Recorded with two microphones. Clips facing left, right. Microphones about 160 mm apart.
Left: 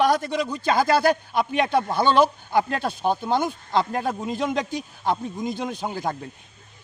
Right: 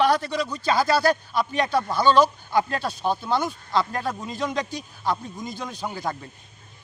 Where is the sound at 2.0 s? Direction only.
55° left (ahead or behind).